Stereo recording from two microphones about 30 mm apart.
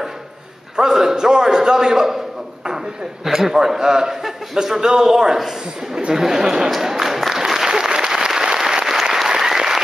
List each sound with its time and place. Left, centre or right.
0.7 s a man's voice: centre
3.3 s a man's voice: centre
6.8 s applause: centre